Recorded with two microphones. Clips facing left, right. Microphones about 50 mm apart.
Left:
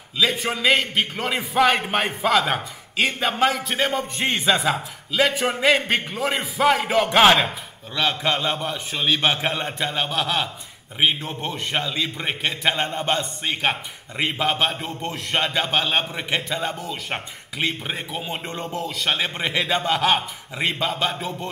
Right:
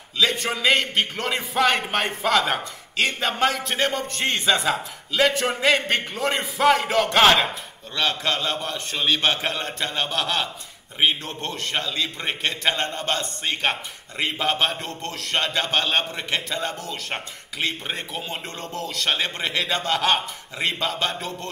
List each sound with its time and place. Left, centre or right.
0.2 s a man's voice: centre